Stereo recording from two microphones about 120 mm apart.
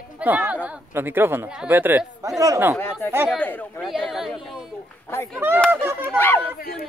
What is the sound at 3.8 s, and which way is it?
Speech, centre (ahead or behind).